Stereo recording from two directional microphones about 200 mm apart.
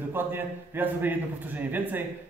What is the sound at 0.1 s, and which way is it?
A man's voice, 10° right (ahead or behind).